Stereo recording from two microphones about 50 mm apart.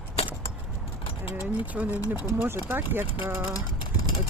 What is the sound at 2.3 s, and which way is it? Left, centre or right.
Speech, right.